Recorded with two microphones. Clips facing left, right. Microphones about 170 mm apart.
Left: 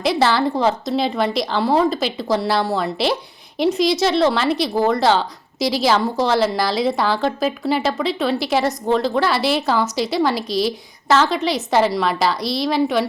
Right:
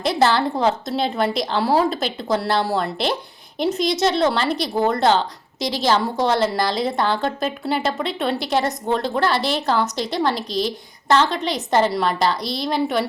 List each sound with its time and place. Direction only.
0.0 s a woman's voice: centre (ahead or behind)